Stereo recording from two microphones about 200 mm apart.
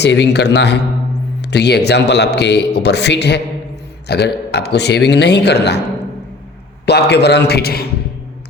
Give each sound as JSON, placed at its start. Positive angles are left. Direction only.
{"t": 0.0, "sound": "a man's voice", "side_deg": 60}
{"t": 6.8, "sound": "a man's voice", "side_deg": 55}